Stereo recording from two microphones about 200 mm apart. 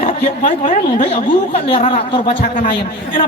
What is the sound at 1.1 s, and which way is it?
A woman's voice, 25° left (ahead or behind).